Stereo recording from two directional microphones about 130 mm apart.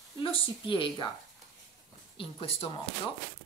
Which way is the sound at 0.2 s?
40° left (ahead or behind).